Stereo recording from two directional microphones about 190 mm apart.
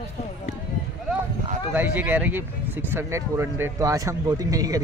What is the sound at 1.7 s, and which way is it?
Speech, 10° right (ahead or behind).